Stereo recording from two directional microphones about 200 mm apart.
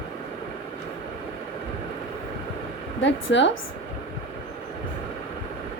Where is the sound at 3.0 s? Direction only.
65° left (ahead or behind).